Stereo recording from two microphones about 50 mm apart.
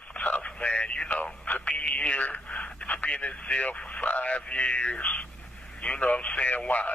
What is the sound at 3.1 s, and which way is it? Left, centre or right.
A man's voice, left.